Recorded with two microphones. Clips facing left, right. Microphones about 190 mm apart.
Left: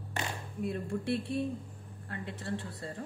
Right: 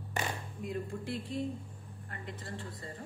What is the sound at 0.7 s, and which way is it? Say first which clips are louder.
Speech: left 4 dB; 70° left (ahead or behind).